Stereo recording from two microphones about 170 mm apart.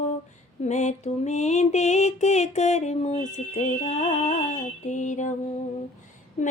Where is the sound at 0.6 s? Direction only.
45° left (ahead or behind).